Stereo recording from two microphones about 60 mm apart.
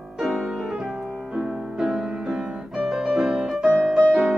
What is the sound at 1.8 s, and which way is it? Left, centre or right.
Music, centre.